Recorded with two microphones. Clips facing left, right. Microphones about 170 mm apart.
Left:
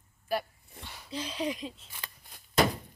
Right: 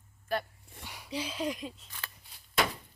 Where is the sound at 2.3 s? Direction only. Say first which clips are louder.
Left 5 dB; 45° left (ahead or behind).